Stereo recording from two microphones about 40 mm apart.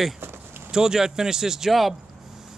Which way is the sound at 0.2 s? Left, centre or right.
Right.